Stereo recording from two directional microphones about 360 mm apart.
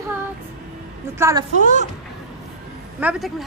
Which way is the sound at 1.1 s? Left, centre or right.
Centre.